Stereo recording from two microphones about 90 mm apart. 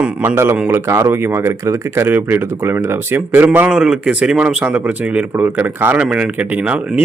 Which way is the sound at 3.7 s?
5° right (ahead or behind).